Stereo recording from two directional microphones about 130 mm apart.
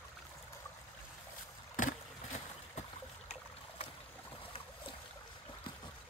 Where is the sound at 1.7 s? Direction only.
90° left.